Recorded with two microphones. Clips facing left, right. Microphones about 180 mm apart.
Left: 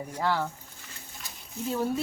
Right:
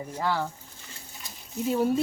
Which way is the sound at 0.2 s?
10° right (ahead or behind).